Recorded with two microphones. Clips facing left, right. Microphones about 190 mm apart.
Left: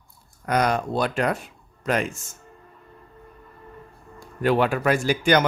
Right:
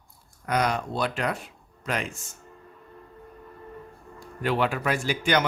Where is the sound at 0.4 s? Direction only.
45° left (ahead or behind).